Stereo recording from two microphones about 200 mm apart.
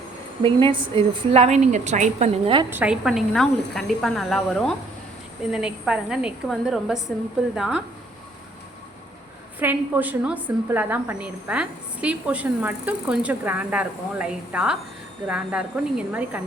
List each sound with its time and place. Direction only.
0.7 s a woman's voice: 25° right (ahead or behind)
2.6 s speech: 10° right (ahead or behind)
9.6 s a woman's voice: 10° right (ahead or behind)